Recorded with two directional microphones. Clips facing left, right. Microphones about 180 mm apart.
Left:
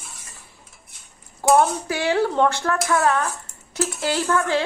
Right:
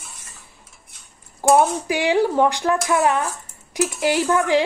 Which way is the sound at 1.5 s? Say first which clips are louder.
Right 1 dB; 15° right (ahead or behind).